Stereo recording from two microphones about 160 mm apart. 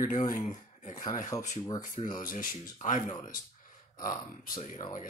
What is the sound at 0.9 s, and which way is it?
Speech, 25° left (ahead or behind).